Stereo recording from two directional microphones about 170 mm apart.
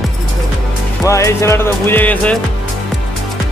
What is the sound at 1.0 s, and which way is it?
Speech, 15° left (ahead or behind).